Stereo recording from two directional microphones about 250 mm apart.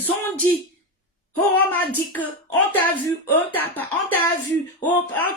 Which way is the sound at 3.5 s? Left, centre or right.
Centre.